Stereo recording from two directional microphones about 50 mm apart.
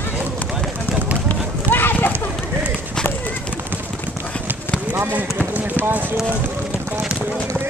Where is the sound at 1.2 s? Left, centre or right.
Left.